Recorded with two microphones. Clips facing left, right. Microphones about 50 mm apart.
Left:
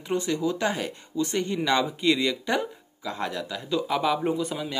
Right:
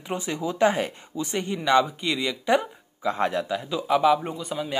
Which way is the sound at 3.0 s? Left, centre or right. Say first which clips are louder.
Right 6 dB; right.